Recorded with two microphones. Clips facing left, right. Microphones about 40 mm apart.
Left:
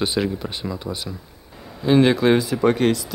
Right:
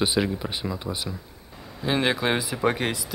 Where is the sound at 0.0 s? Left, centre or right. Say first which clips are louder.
Left 2 dB; centre.